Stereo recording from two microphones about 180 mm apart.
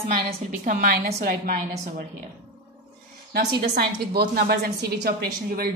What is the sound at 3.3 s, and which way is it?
A woman's voice, 60° right (ahead or behind).